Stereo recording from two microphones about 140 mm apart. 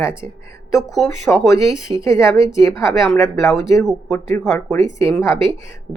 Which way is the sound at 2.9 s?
Centre (ahead or behind).